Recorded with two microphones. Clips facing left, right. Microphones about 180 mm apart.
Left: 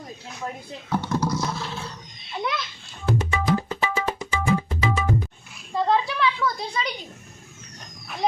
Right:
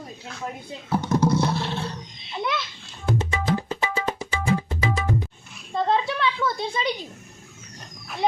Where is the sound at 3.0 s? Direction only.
20° right (ahead or behind).